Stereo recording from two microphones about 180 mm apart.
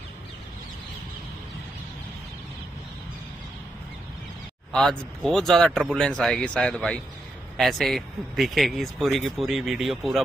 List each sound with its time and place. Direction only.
4.7 s a man's voice: centre (ahead or behind)